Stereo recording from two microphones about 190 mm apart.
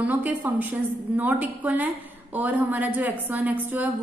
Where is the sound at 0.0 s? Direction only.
10° right (ahead or behind).